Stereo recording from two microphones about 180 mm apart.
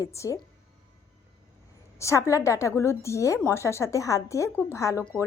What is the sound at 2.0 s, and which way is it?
A woman's voice, 15° left (ahead or behind).